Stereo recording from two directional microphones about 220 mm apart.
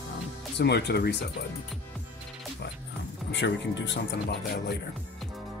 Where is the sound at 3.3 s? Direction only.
55° left (ahead or behind).